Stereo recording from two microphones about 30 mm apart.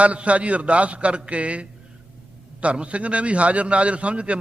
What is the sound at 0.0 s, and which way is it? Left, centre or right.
A man's voice, right.